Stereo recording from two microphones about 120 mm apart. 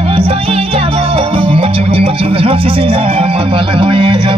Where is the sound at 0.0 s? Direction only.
55° right (ahead or behind).